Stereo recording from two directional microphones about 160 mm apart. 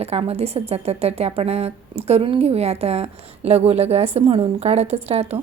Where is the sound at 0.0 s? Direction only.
40° right (ahead or behind).